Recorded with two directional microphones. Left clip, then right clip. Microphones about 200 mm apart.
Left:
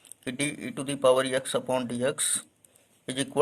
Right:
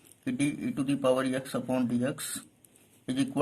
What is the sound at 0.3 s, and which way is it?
A man's voice, 40° left (ahead or behind).